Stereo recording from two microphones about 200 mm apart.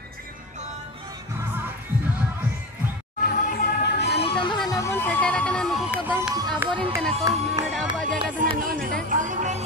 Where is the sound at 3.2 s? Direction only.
50° left (ahead or behind).